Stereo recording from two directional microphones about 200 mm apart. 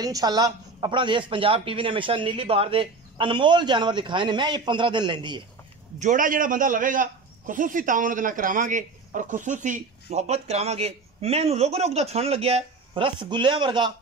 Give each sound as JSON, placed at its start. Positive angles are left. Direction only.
{"t": 0.0, "sound": "a man's voice", "side_deg": -20}
{"t": 5.9, "sound": "a man's voice", "side_deg": -40}